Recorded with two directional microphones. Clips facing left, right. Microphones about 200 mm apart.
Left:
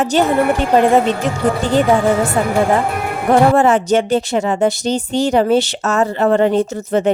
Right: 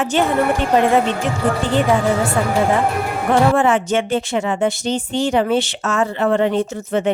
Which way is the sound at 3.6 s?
40° left (ahead or behind).